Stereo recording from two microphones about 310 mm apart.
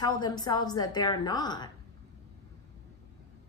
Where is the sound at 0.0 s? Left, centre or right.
Centre.